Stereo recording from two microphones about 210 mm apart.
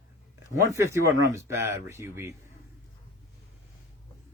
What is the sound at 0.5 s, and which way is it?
Speech, 15° right (ahead or behind).